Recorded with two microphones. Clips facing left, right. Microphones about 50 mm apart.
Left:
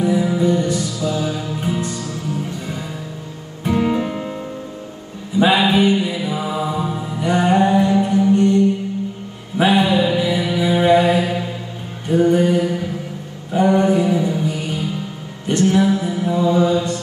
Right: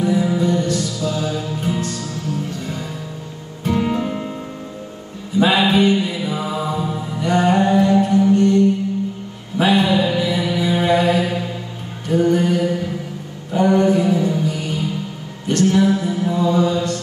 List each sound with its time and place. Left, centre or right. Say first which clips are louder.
0.0 s music: left 1 dB; centre
3.7 s music: left 2 dB; centre
5.4 s mantra: even; centre
8.3 s music: left 2 dB; centre
9.6 s mantra: left 1 dB; centre
13.5 s music: even; centre
15.4 s mantra: even; centre